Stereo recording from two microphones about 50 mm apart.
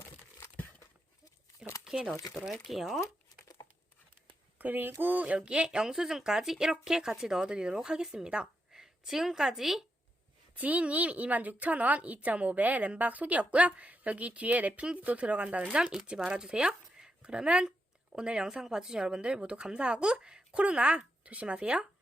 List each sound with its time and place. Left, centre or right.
2.3 s speech: centre
4.5 s a woman's voice: right
5.2 s speech: right
8.7 s a woman's voice: centre
10.6 s a woman's voice: right